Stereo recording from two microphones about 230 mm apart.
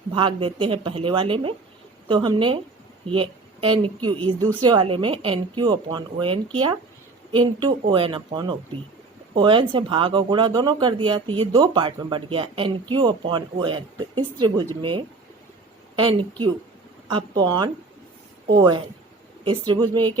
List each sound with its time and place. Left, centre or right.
0.1 s a woman's voice: right